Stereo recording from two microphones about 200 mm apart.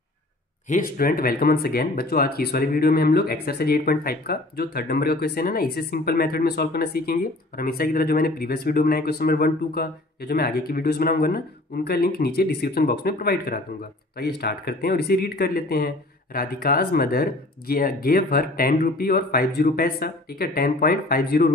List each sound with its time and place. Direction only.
0.7 s speech: 45° left (ahead or behind)